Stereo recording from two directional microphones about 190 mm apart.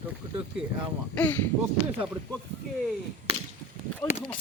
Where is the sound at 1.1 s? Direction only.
10° left (ahead or behind).